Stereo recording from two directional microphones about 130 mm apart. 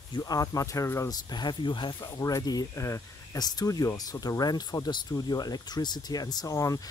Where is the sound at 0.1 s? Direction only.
30° left (ahead or behind).